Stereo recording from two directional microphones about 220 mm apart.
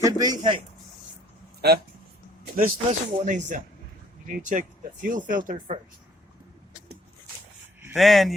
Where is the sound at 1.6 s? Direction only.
45° right (ahead or behind).